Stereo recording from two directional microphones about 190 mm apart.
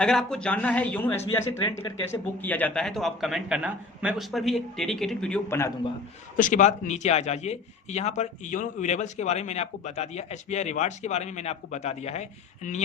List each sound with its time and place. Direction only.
0.0 s a man's voice: 5° left (ahead or behind)
6.3 s a man's voice: 45° left (ahead or behind)